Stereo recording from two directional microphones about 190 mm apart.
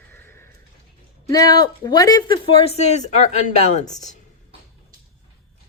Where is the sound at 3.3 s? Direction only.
40° left (ahead or behind).